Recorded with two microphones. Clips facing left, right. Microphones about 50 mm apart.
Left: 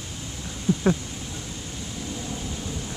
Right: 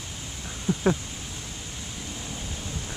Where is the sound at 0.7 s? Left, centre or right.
Centre.